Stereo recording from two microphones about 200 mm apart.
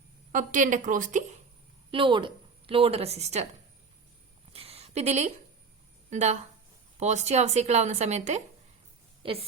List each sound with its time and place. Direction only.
0.3 s a woman's voice: 40° right (ahead or behind)
1.9 s a woman's voice: 25° right (ahead or behind)
4.5 s a sound: 30° right (ahead or behind)
6.1 s a woman's voice: 35° right (ahead or behind)